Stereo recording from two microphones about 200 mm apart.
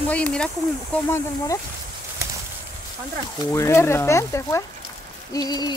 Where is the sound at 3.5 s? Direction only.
15° left (ahead or behind).